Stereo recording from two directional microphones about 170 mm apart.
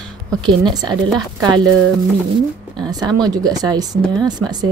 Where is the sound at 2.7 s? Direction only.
25° right (ahead or behind).